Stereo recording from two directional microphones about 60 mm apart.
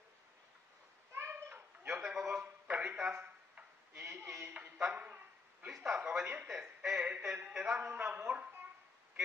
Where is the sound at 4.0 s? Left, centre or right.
Right; by 6.2 s centre.